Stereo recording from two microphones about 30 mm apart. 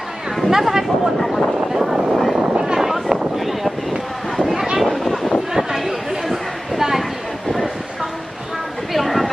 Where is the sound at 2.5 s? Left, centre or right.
Right.